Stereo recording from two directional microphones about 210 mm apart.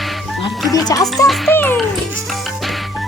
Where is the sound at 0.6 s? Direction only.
15° left (ahead or behind).